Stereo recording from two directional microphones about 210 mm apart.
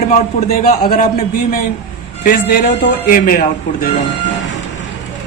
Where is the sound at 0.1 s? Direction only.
35° left (ahead or behind).